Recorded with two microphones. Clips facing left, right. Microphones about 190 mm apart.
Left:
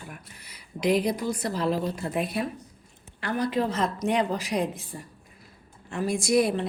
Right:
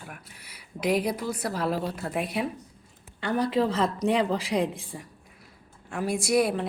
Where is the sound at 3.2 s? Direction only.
30° right (ahead or behind).